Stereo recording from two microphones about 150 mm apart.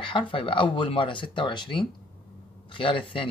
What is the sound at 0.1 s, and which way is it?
Speech, 35° left (ahead or behind).